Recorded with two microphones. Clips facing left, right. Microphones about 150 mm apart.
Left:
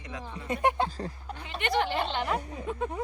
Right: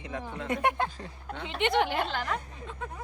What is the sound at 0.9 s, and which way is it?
Speech, 35° left (ahead or behind).